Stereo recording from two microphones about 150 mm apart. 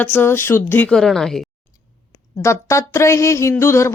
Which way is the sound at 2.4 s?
20° left (ahead or behind).